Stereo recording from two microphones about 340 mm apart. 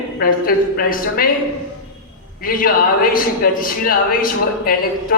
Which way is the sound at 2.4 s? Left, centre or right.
Left.